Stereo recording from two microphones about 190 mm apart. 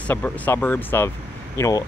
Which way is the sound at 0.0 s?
10° left (ahead or behind).